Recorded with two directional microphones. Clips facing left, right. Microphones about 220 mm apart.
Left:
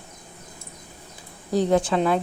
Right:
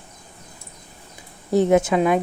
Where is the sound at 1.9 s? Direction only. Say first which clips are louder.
Right 3 dB; 10° right (ahead or behind).